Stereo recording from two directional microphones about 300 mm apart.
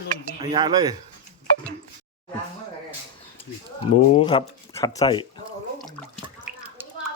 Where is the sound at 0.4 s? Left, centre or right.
Centre.